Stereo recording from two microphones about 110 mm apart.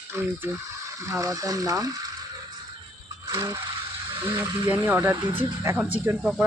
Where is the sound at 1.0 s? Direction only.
30° right (ahead or behind).